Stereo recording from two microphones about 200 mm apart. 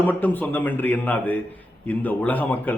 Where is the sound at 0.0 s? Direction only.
10° left (ahead or behind).